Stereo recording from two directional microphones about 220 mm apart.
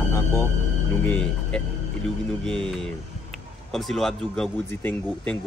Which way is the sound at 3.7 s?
Centre (ahead or behind).